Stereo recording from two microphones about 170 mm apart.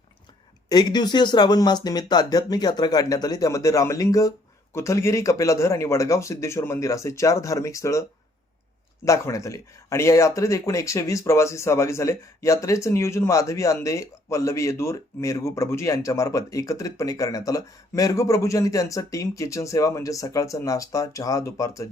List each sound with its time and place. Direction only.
0.7 s speech: 25° left (ahead or behind)
9.0 s speech: 20° left (ahead or behind)